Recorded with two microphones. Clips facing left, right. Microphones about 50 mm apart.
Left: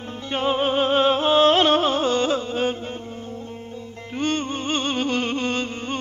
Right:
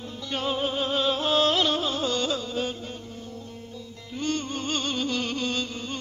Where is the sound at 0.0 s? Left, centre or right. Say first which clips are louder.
Left 6 dB; left.